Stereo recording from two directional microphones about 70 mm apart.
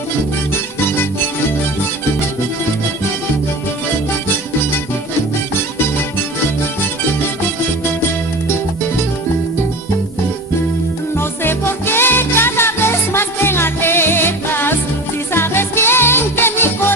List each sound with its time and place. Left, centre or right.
11.2 s music: left